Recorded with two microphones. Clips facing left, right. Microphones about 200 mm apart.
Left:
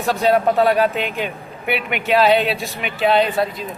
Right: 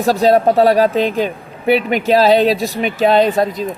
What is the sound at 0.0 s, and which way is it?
A woman's voice, 35° right (ahead or behind).